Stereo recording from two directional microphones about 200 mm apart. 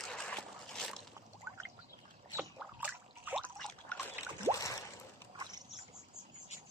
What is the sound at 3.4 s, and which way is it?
Trickle, 5° left (ahead or behind).